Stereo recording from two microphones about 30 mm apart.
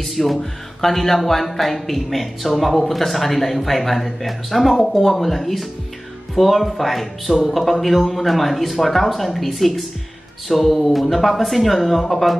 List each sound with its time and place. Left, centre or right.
0.1 s speech: centre
4.7 s speech: centre